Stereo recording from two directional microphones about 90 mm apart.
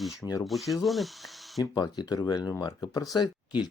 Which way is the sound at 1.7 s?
50° left (ahead or behind).